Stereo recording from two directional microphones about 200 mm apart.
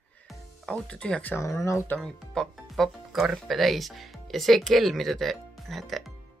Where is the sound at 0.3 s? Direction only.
Centre (ahead or behind).